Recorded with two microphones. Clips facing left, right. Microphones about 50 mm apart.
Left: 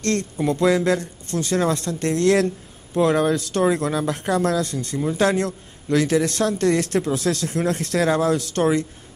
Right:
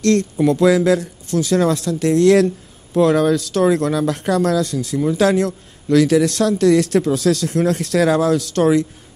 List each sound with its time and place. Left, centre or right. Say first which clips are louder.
0.1 s speech: right 6 dB; centre